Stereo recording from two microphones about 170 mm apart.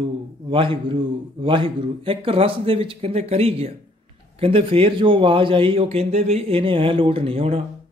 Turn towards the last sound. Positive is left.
turn(degrees=-35)  # may be behind; listen again after turning